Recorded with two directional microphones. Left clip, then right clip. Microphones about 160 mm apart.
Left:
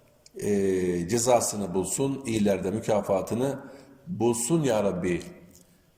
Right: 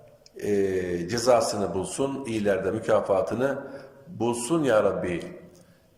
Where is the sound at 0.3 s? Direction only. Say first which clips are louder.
Right 1 dB; 30° left (ahead or behind).